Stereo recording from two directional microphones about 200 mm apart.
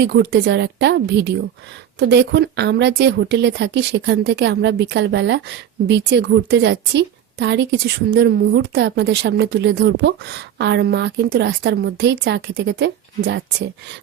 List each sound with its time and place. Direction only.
0.0 s speech: 55° right (ahead or behind)